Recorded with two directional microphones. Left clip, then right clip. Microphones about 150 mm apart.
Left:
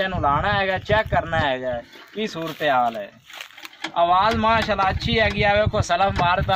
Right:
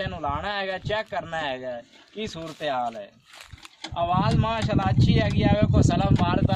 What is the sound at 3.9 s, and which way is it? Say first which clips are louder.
Speech: left 7 dB; 10° right (ahead or behind).